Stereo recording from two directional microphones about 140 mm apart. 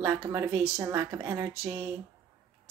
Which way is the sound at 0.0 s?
20° right (ahead or behind).